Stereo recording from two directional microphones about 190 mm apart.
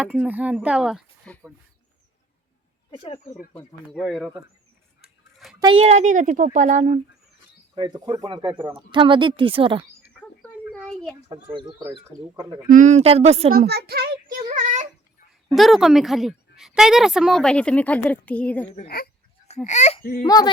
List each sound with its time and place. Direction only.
0.0 s a woman's voice: 10° right (ahead or behind)
2.9 s speech: 30° left (ahead or behind)
3.9 s a woman's voice: centre (ahead or behind)
5.5 s speech: 30° right (ahead or behind)
7.8 s speech: 20° right (ahead or behind)
10.4 s a sound: 5° left (ahead or behind)
11.5 s speech: 15° right (ahead or behind)
12.7 s speech: 40° right (ahead or behind)
13.5 s a child's voice: 55° right (ahead or behind)
14.5 s a sound: 40° right (ahead or behind)
15.5 s a woman's voice: centre (ahead or behind)
18.9 s speech: 55° left (ahead or behind)
19.6 s speech: 40° left (ahead or behind)
20.2 s speech: 20° left (ahead or behind)